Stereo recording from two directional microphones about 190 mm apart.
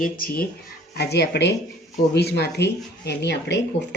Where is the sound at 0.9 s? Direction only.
60° left (ahead or behind).